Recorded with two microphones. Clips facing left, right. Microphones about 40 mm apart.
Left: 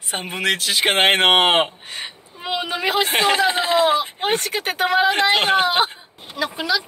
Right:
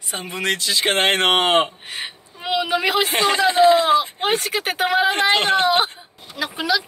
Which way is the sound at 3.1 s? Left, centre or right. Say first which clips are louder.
Even; centre.